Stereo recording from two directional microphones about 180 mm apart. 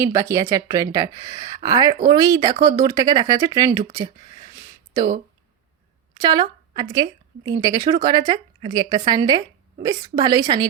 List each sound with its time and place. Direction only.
0.0 s speech: 15° right (ahead or behind)
4.5 s a sound: 15° right (ahead or behind)
6.2 s a woman's voice: 25° right (ahead or behind)